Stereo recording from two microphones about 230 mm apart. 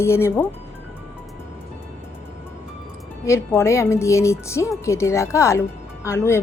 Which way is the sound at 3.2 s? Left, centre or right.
Centre.